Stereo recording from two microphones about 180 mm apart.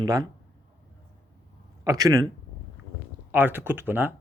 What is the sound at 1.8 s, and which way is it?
Speech, 20° right (ahead or behind).